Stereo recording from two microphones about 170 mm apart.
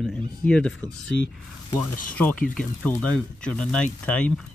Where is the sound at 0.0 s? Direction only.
5° left (ahead or behind).